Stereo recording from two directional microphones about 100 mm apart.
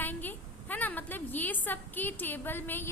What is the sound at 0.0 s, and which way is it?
A woman's voice, 20° left (ahead or behind).